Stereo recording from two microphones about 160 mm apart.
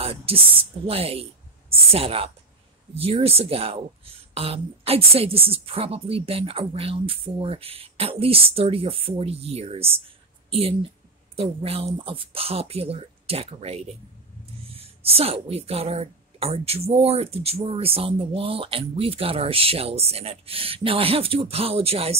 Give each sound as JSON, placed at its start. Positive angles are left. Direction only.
{"t": 0.0, "sound": "a woman's voice", "side_deg": -35}